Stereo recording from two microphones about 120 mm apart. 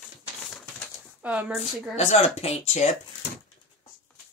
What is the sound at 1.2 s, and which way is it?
Speech, 10° right (ahead or behind).